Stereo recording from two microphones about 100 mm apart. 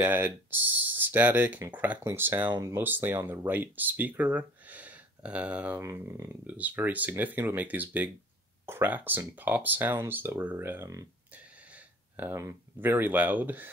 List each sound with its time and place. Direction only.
0.0 s speech: 20° right (ahead or behind)
5.8 s speech: 25° right (ahead or behind)
6.4 s speech: 15° right (ahead or behind); by 11.1 s 30° right (ahead or behind)
11.3 s a sound: 15° right (ahead or behind)
12.4 s speech: 25° right (ahead or behind)